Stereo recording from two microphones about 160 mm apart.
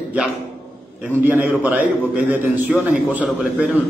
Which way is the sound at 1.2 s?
10° right (ahead or behind).